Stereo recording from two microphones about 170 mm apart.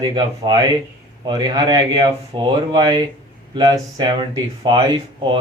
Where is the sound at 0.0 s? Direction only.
25° right (ahead or behind).